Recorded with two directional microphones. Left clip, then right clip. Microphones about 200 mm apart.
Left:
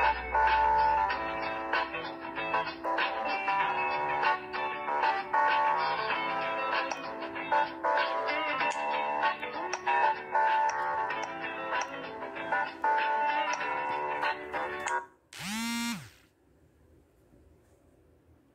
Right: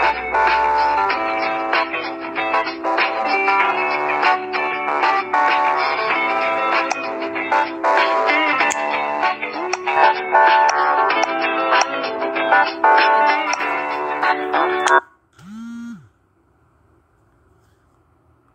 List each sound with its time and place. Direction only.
0.0 s music: 35° right (ahead or behind)